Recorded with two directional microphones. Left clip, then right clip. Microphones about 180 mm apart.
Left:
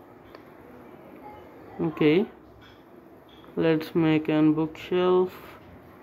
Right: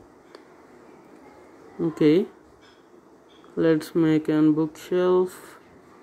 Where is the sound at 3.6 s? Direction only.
20° right (ahead or behind).